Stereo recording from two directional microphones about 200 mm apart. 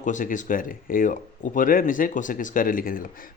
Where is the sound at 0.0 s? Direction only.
40° left (ahead or behind).